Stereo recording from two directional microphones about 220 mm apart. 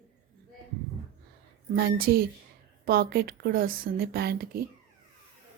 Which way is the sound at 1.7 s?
45° right (ahead or behind).